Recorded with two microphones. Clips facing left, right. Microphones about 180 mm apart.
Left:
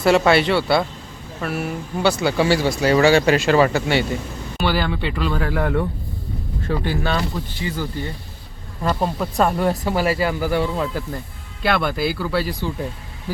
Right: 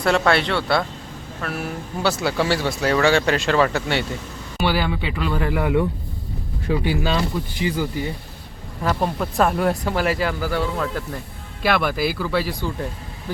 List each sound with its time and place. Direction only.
0.0 s speech: 5° left (ahead or behind)
4.6 s speech: 10° right (ahead or behind)
8.8 s speech: centre (ahead or behind)
11.6 s speech: 5° right (ahead or behind)